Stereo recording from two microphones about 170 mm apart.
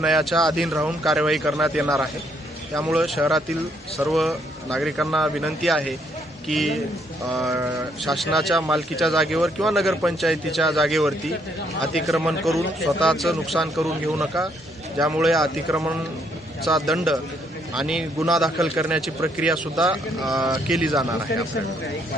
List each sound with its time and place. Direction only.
0.0 s a man's voice: centre (ahead or behind)
7.3 s speech: 20° right (ahead or behind)
8.0 s a man's voice: centre (ahead or behind)
15.7 s speech: 10° right (ahead or behind)
16.6 s a man's voice: centre (ahead or behind)